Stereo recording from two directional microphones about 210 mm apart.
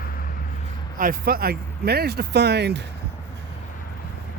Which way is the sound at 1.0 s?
45° right (ahead or behind).